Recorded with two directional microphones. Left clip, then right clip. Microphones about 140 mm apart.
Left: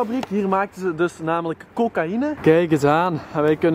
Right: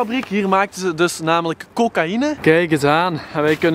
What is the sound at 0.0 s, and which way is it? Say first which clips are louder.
Speech: right 3 dB; 15° right (ahead or behind).